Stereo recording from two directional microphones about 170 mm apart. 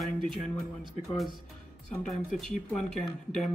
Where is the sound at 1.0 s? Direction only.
Centre (ahead or behind).